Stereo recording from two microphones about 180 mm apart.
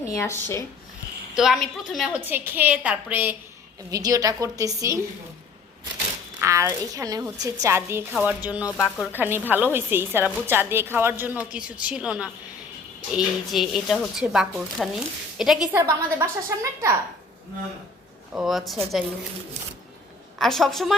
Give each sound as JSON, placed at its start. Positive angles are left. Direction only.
{"t": 0.1, "sound": "speech", "side_deg": 15}
{"t": 1.4, "sound": "speech", "side_deg": 0}
{"t": 2.3, "sound": "a woman's voice", "side_deg": -10}
{"t": 6.4, "sound": "a woman's voice", "side_deg": -15}
{"t": 15.8, "sound": "a woman's voice", "side_deg": -20}
{"t": 18.3, "sound": "speech", "side_deg": 0}
{"t": 20.4, "sound": "speech", "side_deg": 0}